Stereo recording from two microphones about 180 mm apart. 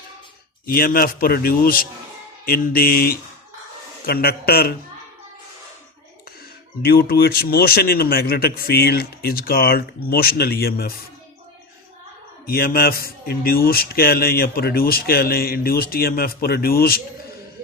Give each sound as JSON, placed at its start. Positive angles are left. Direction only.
{"t": 0.6, "sound": "speech", "side_deg": 55}
{"t": 6.8, "sound": "speech", "side_deg": 55}
{"t": 12.5, "sound": "speech", "side_deg": 55}